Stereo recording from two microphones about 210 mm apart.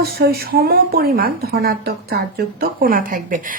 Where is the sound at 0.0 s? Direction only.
45° right (ahead or behind).